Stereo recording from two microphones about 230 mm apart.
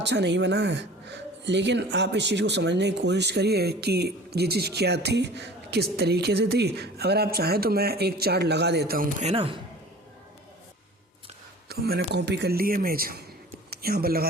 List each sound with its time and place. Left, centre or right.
0.0 s speech: right
11.7 s speech: right